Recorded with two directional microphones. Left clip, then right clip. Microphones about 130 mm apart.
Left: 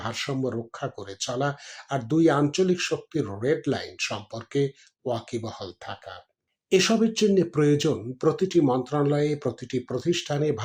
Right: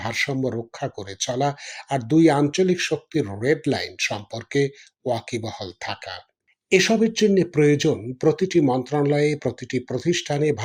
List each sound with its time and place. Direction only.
0.0 s speech: 45° right (ahead or behind)
6.7 s speech: 35° right (ahead or behind)